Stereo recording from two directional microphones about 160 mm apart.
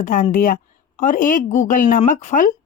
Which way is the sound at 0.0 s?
55° left (ahead or behind).